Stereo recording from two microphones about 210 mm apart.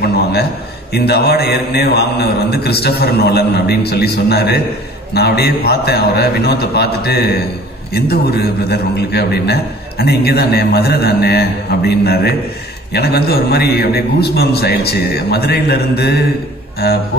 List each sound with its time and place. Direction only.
0.9 s a man's voice: 50° left (ahead or behind)